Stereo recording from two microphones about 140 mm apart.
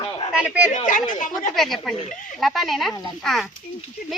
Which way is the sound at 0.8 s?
70° left (ahead or behind).